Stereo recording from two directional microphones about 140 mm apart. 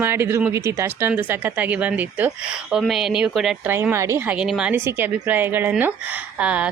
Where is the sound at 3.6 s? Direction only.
15° right (ahead or behind).